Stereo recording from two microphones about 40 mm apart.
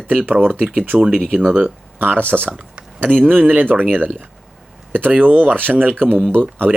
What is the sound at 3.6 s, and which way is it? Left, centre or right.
Speech, right.